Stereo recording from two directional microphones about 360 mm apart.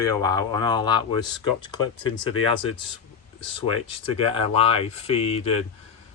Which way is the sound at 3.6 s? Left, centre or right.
Centre.